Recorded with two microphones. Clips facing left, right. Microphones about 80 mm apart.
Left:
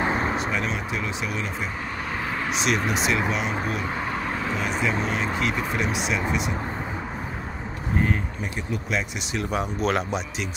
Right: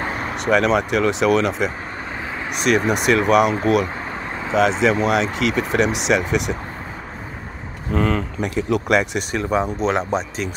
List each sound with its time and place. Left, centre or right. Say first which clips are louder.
0.5 s speech: right 11 dB; right
2.9 s speech: right 8 dB; right
4.6 s speech: right 13 dB; right
8.0 s speech: right 6 dB; right
9.3 s speech: right 5 dB; right